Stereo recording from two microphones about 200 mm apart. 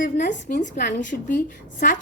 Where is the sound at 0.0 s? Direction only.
40° left (ahead or behind).